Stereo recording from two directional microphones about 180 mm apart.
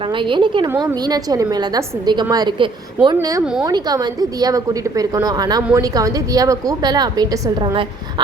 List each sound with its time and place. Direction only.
0.0 s a woman's voice: 30° right (ahead or behind)
3.4 s a woman's voice: 5° right (ahead or behind)
3.7 s a woman's voice: 20° right (ahead or behind)